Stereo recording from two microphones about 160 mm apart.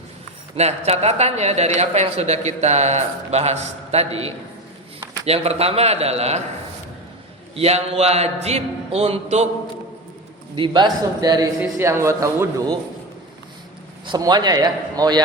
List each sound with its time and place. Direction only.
0.5 s speech: 40° right (ahead or behind)
7.5 s speech: 40° right (ahead or behind)
10.5 s a man's voice: 30° right (ahead or behind)
14.1 s a man's voice: 25° right (ahead or behind)